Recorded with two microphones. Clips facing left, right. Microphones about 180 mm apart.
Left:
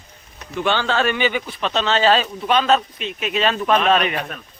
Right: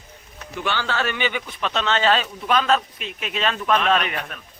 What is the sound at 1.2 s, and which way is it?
Speech, 35° left (ahead or behind).